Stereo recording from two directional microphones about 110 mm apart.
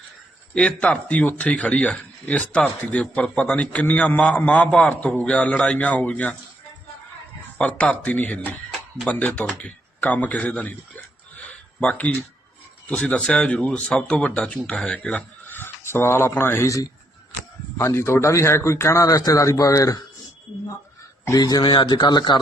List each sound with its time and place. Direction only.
0.5 s a man's voice: 10° left (ahead or behind)
7.6 s a man's voice: 10° left (ahead or behind)
11.4 s a sound: 10° left (ahead or behind)
12.9 s a man's voice: 10° left (ahead or behind); by 20.1 s 30° left (ahead or behind)
21.3 s speech: 35° left (ahead or behind)